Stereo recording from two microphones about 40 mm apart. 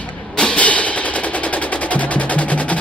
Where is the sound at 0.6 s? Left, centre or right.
Left.